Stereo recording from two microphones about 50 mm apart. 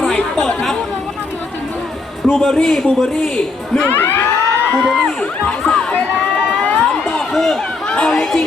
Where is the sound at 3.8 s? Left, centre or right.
Left.